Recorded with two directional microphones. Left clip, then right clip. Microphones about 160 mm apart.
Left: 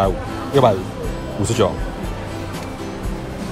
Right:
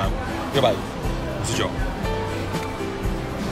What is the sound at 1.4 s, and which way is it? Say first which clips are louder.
Speech: left 9 dB; 20° left (ahead or behind).